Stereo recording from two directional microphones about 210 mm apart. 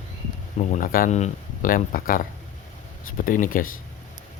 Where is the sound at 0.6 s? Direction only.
35° left (ahead or behind).